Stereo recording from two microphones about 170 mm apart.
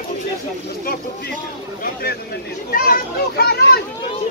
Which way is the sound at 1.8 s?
65° left (ahead or behind).